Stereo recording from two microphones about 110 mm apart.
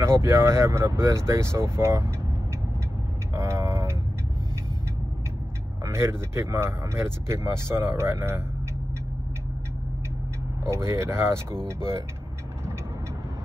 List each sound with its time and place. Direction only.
0.0 s speech: 25° right (ahead or behind)
3.3 s vehicle: 30° right (ahead or behind)
5.9 s speech: 25° right (ahead or behind)
10.6 s speech: 25° right (ahead or behind)